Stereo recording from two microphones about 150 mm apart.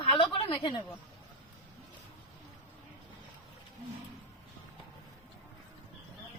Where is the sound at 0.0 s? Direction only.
35° left (ahead or behind).